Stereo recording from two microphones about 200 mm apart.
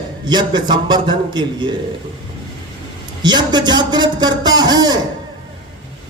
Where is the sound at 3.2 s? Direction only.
20° right (ahead or behind).